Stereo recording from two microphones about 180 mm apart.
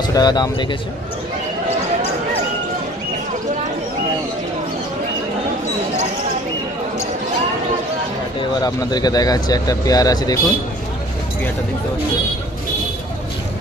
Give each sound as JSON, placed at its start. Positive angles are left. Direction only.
{"t": 0.0, "sound": "speech", "side_deg": 25}
{"t": 8.4, "sound": "speech", "side_deg": 20}